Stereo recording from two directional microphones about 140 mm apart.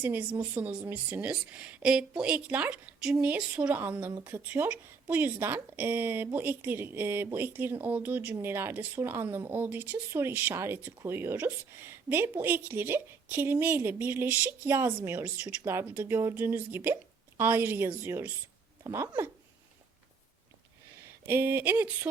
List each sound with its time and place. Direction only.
0.0 s a woman's voice: 10° right (ahead or behind)
18.8 s speech: 25° right (ahead or behind)
21.2 s a woman's voice: 15° right (ahead or behind)